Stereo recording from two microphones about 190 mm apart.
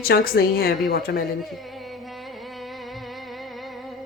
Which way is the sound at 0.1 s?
55° left (ahead or behind).